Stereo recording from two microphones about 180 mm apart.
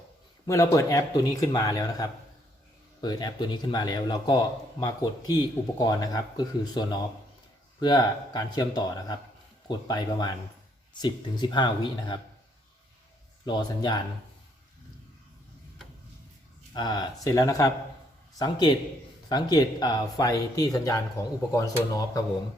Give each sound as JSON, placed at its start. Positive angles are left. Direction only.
{"t": 0.4, "sound": "speech", "side_deg": 15}
{"t": 13.4, "sound": "speech", "side_deg": 25}
{"t": 16.7, "sound": "speech", "side_deg": 25}